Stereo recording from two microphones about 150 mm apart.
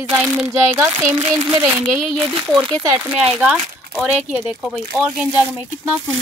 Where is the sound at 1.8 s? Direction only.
15° right (ahead or behind).